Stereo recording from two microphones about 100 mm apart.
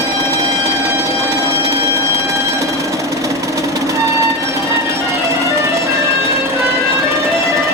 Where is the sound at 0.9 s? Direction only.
30° right (ahead or behind).